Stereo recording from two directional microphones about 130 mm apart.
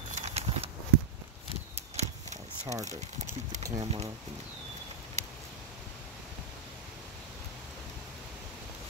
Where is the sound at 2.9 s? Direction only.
65° right (ahead or behind).